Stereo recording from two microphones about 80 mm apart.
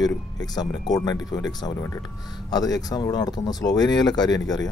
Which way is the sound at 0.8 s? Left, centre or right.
Left.